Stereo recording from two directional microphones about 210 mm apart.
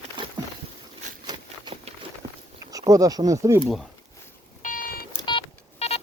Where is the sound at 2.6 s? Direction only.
15° right (ahead or behind).